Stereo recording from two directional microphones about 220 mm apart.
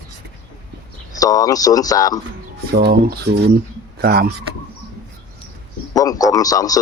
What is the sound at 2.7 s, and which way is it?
Speech, 45° right (ahead or behind).